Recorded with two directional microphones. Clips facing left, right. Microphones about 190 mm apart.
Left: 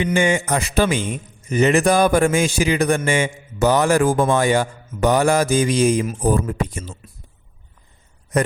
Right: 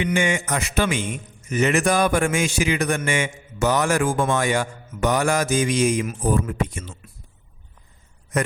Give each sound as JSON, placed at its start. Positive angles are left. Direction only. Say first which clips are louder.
{"t": 0.0, "sound": "a man's voice", "louder": "left 4 dB", "side_deg": 35}